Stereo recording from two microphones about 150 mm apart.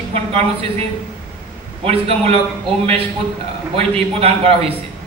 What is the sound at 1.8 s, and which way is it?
Speech, 45° right (ahead or behind).